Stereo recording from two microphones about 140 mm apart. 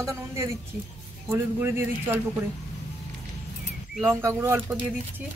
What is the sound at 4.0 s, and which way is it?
Speech, 15° right (ahead or behind).